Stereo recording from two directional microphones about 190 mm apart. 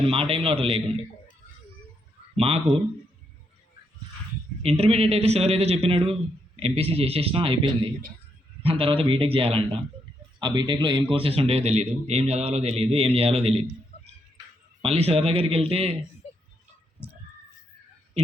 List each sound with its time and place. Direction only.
0.0 s a man's voice: 30° right (ahead or behind)
2.3 s a man's voice: 30° right (ahead or behind)
4.6 s a man's voice: 30° right (ahead or behind)
14.8 s a man's voice: 30° right (ahead or behind)